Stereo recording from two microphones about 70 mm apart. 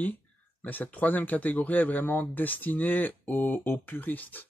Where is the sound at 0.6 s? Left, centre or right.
Left.